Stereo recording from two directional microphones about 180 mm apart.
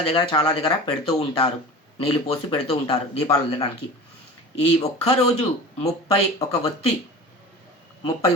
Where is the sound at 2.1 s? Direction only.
30° left (ahead or behind).